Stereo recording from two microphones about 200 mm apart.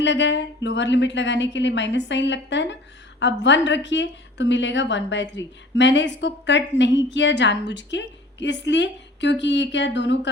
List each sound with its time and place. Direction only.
0.0 s a woman's voice: 65° left (ahead or behind)